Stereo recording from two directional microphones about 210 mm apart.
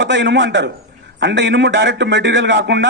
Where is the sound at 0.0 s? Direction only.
55° right (ahead or behind).